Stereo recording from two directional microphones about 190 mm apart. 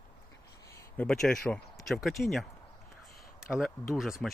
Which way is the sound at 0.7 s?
5° left (ahead or behind).